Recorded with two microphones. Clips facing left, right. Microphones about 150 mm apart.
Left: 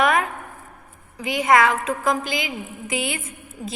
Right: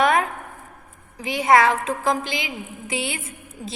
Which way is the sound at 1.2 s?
30° right (ahead or behind).